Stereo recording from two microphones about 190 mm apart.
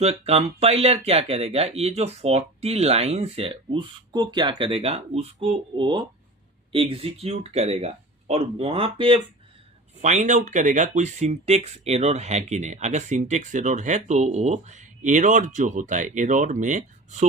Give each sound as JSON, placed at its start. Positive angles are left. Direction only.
{"t": 0.0, "sound": "speech", "side_deg": -30}
{"t": 10.0, "sound": "speech", "side_deg": -40}